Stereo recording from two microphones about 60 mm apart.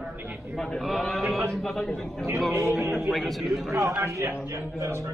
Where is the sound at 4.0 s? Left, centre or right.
Right.